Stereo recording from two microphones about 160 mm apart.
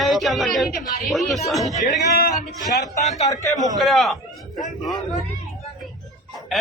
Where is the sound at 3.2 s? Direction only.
20° left (ahead or behind).